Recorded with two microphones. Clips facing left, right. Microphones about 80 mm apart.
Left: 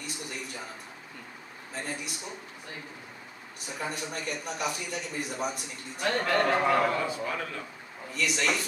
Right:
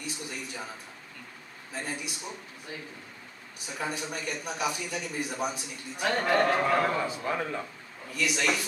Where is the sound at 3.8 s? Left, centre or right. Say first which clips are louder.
Right 1 dB; centre.